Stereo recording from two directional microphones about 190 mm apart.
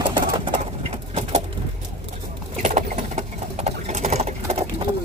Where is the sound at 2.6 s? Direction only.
40° right (ahead or behind).